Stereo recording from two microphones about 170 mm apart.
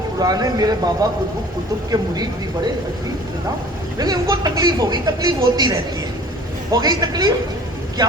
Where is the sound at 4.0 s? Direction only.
25° right (ahead or behind).